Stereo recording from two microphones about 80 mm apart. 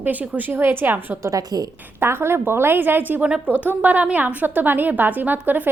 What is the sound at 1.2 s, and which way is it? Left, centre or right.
Speech, right.